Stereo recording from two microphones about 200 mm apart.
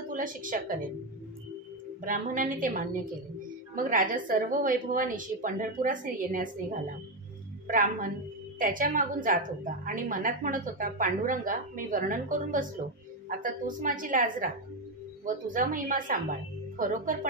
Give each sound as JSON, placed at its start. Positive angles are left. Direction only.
{"t": 0.1, "sound": "a woman's voice", "side_deg": -40}
{"t": 2.0, "sound": "a woman's voice", "side_deg": -40}